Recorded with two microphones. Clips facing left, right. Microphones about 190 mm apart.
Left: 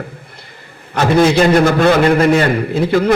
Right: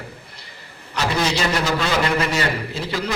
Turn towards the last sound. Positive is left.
turn(degrees=55)  # may be behind; listen again after turning